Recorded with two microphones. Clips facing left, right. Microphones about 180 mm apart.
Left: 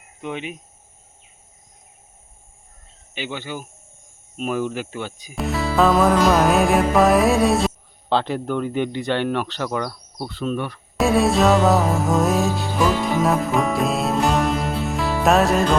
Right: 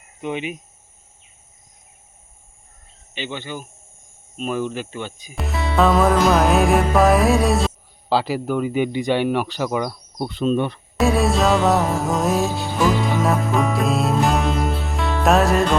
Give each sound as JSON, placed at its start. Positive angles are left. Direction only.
{"t": 0.2, "sound": "music", "side_deg": -5}
{"t": 3.2, "sound": "speech", "side_deg": 10}
{"t": 5.3, "sound": "music", "side_deg": 0}
{"t": 8.1, "sound": "speech", "side_deg": -5}
{"t": 10.9, "sound": "music", "side_deg": 0}